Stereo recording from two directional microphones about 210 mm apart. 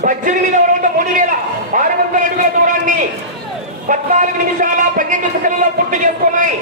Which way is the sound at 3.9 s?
35° right (ahead or behind).